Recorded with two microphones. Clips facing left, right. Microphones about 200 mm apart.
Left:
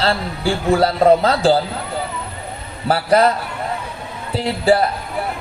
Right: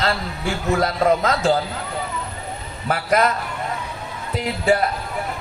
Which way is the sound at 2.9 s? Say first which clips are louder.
Left 5 dB; 30° left (ahead or behind).